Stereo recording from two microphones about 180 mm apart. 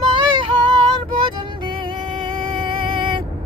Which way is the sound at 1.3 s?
25° right (ahead or behind).